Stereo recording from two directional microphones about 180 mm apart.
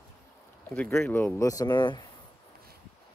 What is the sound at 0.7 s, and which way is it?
Speech, 10° left (ahead or behind).